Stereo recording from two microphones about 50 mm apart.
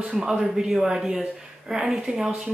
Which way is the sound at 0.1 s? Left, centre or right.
Centre.